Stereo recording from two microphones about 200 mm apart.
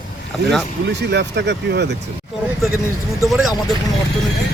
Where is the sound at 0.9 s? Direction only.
60° right (ahead or behind).